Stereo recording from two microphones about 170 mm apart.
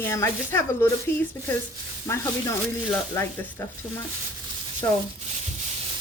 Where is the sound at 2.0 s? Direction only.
15° left (ahead or behind).